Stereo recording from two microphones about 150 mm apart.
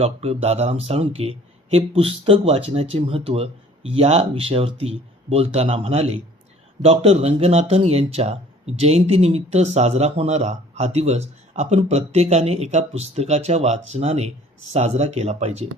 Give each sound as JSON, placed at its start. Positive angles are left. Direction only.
{"t": 0.0, "sound": "speech", "side_deg": -40}